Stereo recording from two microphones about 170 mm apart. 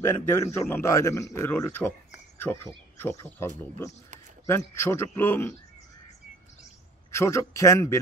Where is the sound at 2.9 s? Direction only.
15° left (ahead or behind).